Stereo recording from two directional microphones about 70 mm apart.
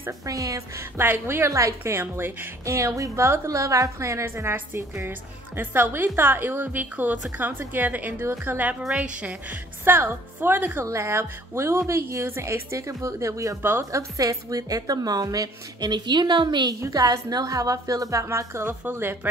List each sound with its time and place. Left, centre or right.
0.3 s a woman's voice: right
0.9 s a woman's voice: right
2.0 s a woman's voice: right
2.6 s a woman's voice: right
8.8 s a woman's voice: centre
9.8 s a woman's voice: right
13.6 s a woman's voice: right
13.9 s a woman's voice: right
16.9 s a woman's voice: right